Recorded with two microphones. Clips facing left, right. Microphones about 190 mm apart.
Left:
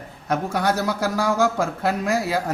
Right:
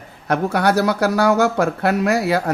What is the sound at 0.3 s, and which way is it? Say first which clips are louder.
Speech: right 4 dB; 65° right (ahead or behind).